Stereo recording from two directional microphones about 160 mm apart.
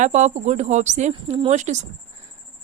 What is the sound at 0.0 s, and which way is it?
Speech, 45° right (ahead or behind).